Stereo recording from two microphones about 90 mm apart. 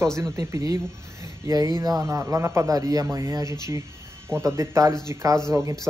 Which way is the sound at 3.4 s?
50° left (ahead or behind).